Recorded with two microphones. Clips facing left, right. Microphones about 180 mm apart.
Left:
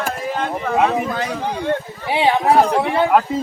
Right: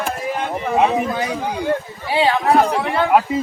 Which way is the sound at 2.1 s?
20° left (ahead or behind).